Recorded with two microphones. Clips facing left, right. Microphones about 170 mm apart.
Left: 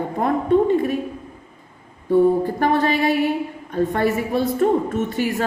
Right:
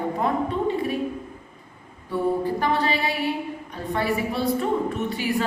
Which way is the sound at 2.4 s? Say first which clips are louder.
Left 4 dB; 50° left (ahead or behind).